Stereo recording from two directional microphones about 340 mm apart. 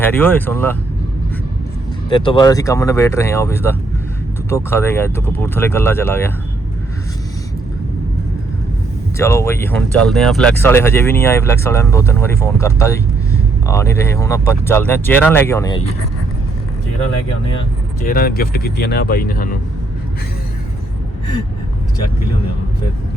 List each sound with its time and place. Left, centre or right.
0.0 s speech: centre
2.0 s speech: centre
9.1 s speech: centre
18.0 s speech: left